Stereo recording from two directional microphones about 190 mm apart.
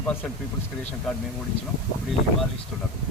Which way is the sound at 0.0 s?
10° left (ahead or behind).